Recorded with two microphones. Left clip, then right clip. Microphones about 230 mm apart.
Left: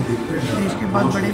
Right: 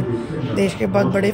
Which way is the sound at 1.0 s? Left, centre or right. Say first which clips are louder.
Right 2 dB; centre.